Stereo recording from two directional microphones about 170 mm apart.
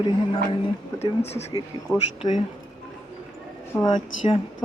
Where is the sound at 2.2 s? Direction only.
40° left (ahead or behind).